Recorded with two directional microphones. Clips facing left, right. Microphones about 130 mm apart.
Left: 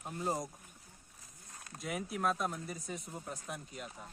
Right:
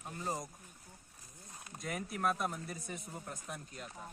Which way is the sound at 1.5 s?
15° right (ahead or behind).